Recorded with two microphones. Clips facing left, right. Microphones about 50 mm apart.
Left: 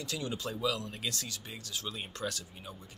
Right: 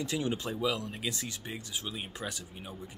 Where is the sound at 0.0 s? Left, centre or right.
Right.